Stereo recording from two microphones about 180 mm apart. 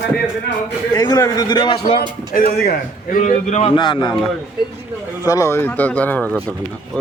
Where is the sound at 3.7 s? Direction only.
25° left (ahead or behind).